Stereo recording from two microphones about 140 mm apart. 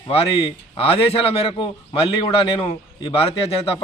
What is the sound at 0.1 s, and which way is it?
Speech, 45° left (ahead or behind).